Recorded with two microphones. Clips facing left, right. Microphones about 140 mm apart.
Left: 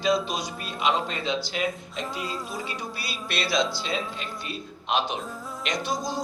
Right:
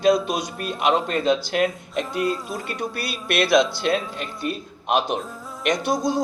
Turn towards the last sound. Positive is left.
turn(degrees=-60)  # may be behind; listen again after turning